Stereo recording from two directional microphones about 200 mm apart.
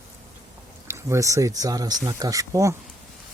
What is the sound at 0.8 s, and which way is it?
Speech, 15° right (ahead or behind).